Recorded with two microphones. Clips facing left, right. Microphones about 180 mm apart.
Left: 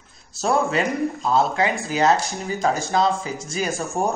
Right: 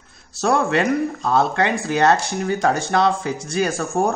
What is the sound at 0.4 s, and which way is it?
Speech, 70° right (ahead or behind).